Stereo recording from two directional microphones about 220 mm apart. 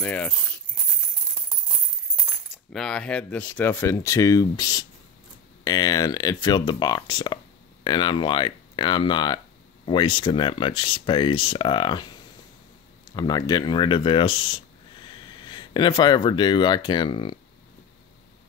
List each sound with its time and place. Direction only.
0.0 s speech: 5° left (ahead or behind)
2.5 s speech: centre (ahead or behind); by 12.1 s 20° left (ahead or behind)
13.1 s speech: 20° left (ahead or behind)